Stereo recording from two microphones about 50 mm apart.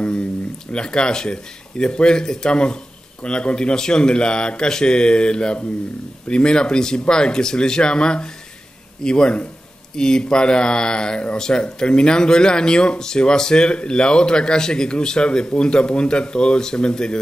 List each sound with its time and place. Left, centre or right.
0.7 s speech: centre